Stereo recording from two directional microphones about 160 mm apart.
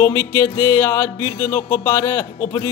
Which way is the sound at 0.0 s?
15° left (ahead or behind).